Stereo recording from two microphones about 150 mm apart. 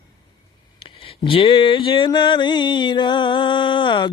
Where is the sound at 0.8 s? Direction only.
35° left (ahead or behind).